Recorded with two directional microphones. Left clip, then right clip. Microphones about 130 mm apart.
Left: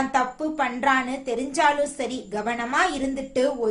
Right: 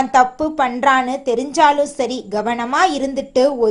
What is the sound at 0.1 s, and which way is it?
A woman's voice, 50° right (ahead or behind).